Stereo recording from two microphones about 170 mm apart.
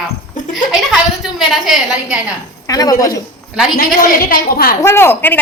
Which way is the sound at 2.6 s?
20° left (ahead or behind).